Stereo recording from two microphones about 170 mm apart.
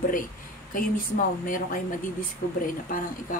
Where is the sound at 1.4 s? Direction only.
55° left (ahead or behind).